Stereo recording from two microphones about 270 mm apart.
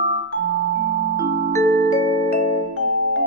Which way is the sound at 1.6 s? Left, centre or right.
Right.